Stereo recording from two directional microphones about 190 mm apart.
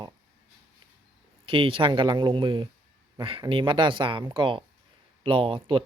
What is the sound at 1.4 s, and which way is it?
Speech, 30° right (ahead or behind).